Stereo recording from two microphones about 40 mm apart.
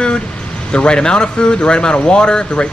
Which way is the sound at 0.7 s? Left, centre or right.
Left.